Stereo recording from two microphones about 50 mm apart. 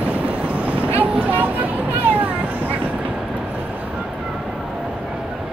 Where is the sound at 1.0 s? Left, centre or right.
Right.